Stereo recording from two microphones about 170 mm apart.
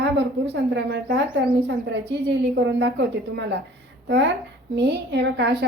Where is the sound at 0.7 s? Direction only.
90° right.